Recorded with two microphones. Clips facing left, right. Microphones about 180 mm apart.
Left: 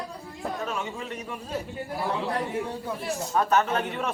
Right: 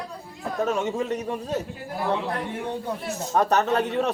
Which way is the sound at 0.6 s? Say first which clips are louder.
Right 8 dB; 40° right (ahead or behind).